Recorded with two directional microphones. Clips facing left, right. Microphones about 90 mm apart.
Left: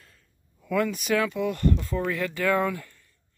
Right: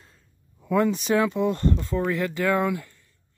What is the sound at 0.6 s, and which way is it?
Speech, 25° right (ahead or behind).